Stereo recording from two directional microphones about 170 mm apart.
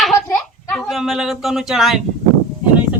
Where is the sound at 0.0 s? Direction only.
Centre (ahead or behind).